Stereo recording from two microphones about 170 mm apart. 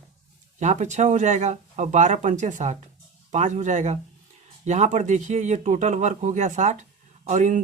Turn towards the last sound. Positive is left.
turn(degrees=-45)  # may be behind; listen again after turning